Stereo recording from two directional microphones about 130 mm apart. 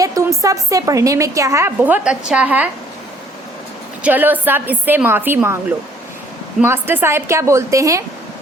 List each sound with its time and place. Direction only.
0.0 s a woman's voice: 25° right (ahead or behind)
4.0 s a woman's voice: 15° right (ahead or behind)
6.6 s a woman's voice: 15° right (ahead or behind)